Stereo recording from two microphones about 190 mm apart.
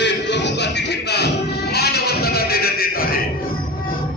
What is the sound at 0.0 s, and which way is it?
Music, 65° left (ahead or behind).